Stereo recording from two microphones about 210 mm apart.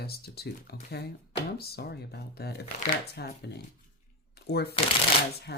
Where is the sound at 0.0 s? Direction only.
50° left (ahead or behind).